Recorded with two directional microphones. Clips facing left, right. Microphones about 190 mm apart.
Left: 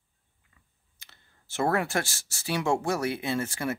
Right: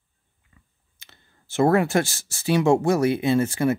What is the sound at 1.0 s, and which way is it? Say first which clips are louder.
Speech: right 4 dB; 20° right (ahead or behind).